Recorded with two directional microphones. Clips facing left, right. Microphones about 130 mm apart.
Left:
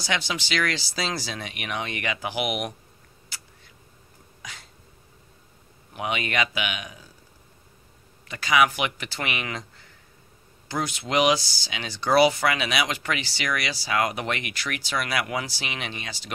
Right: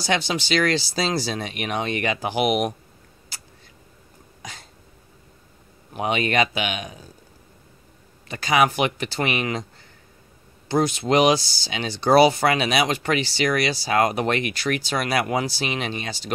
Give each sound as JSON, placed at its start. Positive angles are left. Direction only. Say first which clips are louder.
{"t": 0.0, "sound": "speech", "louder": "right 5 dB", "side_deg": -35}
{"t": 4.4, "sound": "throat clearing", "louder": "right 4 dB", "side_deg": -35}
{"t": 5.9, "sound": "speech", "louder": "right 5 dB", "side_deg": -30}
{"t": 8.3, "sound": "speech", "louder": "right 2 dB", "side_deg": -35}
{"t": 10.7, "sound": "speech", "louder": "right 7 dB", "side_deg": -30}